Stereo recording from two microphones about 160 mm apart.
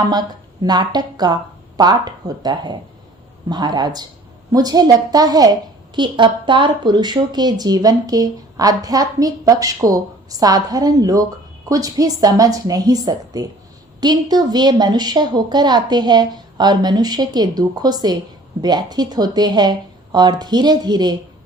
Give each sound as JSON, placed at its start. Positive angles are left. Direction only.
{"t": 0.0, "sound": "speech", "side_deg": -25}